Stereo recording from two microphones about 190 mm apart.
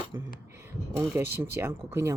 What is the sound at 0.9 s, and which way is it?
Speech, 15° right (ahead or behind).